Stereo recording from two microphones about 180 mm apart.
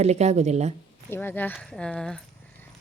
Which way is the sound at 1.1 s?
10° left (ahead or behind).